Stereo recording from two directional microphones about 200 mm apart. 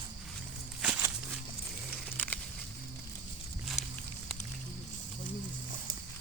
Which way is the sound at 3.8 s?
35° left (ahead or behind).